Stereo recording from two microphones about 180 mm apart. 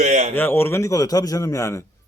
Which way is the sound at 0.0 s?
40° right (ahead or behind).